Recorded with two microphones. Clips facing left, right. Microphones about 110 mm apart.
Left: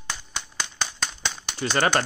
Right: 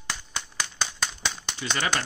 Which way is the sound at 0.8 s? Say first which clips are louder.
Even; centre (ahead or behind).